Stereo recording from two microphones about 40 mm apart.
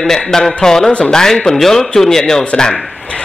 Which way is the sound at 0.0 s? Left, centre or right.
Centre.